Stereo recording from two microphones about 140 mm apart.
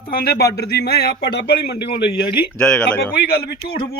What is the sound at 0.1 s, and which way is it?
A man's voice, 90° left.